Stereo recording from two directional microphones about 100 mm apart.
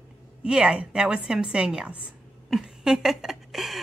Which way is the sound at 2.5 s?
5° right (ahead or behind).